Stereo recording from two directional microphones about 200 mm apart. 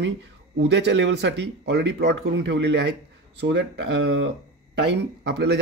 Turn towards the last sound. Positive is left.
turn(degrees=-60)  # may be behind; listen again after turning